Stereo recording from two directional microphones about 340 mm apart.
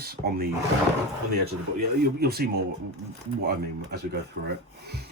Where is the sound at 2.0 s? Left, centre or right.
Right.